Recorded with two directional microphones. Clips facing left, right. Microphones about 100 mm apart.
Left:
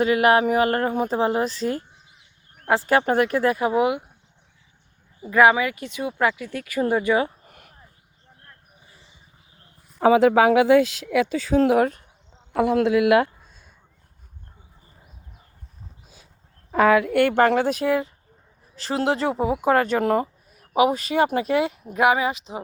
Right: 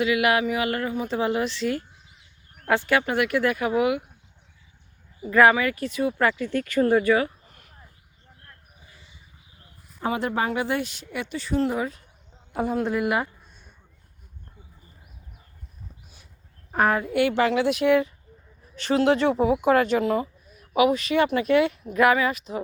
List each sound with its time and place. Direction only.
0.0 s speech: 40° left (ahead or behind); by 4.1 s 25° left (ahead or behind)
5.2 s speech: 15° left (ahead or behind)
7.4 s a sound: 60° left (ahead or behind)
8.4 s a sound: 25° left (ahead or behind)
10.0 s speech: 90° left
11.7 s speech: 65° left (ahead or behind)
12.5 s speech: 90° left
16.8 s speech: 90° left
17.2 s speech: 50° left (ahead or behind); by 19.5 s 30° left (ahead or behind)
19.6 s speech: 40° left (ahead or behind)
21.9 s speech: 20° left (ahead or behind)